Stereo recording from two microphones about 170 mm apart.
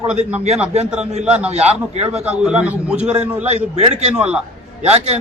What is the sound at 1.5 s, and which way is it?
Speech, 40° right (ahead or behind).